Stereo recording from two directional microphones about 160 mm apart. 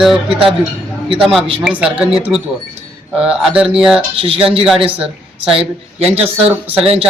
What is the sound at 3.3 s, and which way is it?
Speech, 5° right (ahead or behind).